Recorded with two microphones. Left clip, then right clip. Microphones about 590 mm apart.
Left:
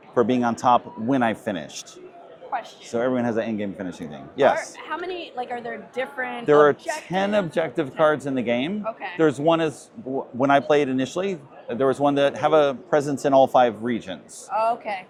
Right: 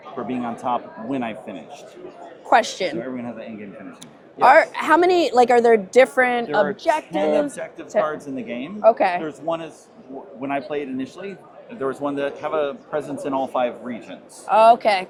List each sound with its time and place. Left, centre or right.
0.3 s speech: left
2.5 s a woman's voice: right
3.0 s speech: left
4.5 s a woman's voice: right
7.1 s speech: left
8.8 s a woman's voice: right
9.2 s speech: left
14.5 s a woman's voice: right